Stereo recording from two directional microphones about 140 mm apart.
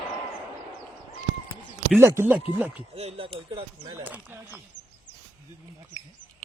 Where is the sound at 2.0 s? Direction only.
20° right (ahead or behind).